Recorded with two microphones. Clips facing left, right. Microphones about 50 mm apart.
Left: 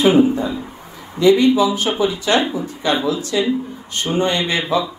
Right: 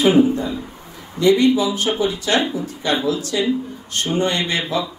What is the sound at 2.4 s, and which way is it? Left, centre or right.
Speech, centre.